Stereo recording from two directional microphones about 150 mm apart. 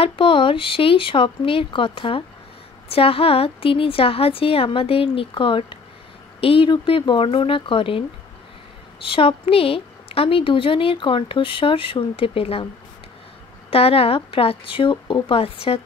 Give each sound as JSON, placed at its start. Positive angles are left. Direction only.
{"t": 0.0, "sound": "a woman's voice", "side_deg": 35}
{"t": 9.0, "sound": "a woman's voice", "side_deg": 35}
{"t": 13.7, "sound": "a woman's voice", "side_deg": 40}